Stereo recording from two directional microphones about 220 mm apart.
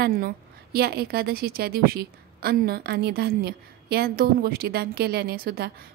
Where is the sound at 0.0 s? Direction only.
40° right (ahead or behind).